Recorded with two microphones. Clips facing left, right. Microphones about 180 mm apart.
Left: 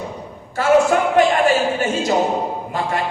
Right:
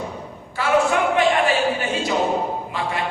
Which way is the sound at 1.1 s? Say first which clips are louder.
Left 5 dB; 40° left (ahead or behind).